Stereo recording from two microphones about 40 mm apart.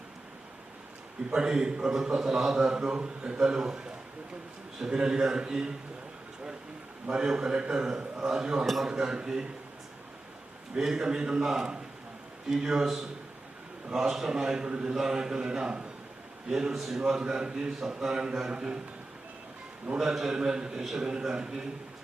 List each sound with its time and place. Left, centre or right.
1.3 s a man's voice: centre
4.8 s a man's voice: right
7.1 s a man's voice: right
8.6 s a man's voice: centre
8.9 s a man's voice: centre
10.8 s a man's voice: centre
16.7 s a man's voice: centre
17.0 s a man's voice: centre
20.0 s a man's voice: centre